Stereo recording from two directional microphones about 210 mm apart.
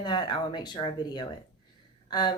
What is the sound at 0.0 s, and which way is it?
A woman's voice, 20° left (ahead or behind).